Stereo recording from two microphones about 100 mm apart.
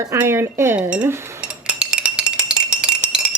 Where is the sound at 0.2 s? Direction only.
25° right (ahead or behind).